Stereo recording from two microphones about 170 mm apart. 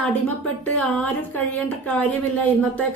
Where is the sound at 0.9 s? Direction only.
10° left (ahead or behind).